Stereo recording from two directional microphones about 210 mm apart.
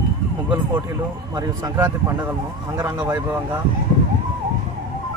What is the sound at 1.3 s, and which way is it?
Speech, 15° right (ahead or behind).